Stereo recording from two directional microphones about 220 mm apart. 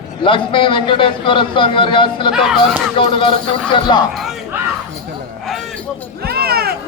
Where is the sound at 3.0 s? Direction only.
20° left (ahead or behind).